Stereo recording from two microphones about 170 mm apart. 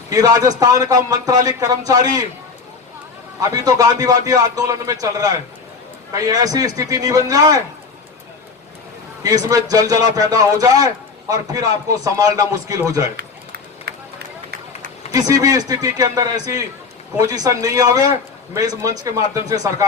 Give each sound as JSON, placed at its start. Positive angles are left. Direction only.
{"t": 0.1, "sound": "a man's voice", "side_deg": -20}
{"t": 3.5, "sound": "a man's voice", "side_deg": -20}
{"t": 9.2, "sound": "a man's voice", "side_deg": -20}
{"t": 13.1, "sound": "run", "side_deg": -70}
{"t": 15.1, "sound": "a man's voice", "side_deg": -20}